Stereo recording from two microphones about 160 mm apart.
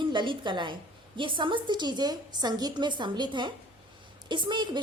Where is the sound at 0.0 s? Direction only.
30° right (ahead or behind).